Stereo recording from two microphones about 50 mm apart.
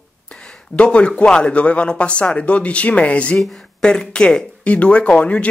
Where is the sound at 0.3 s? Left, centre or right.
Left.